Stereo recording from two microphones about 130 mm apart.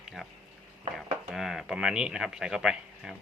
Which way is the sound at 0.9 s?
Centre (ahead or behind).